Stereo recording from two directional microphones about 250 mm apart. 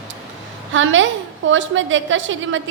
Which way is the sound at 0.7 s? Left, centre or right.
Right.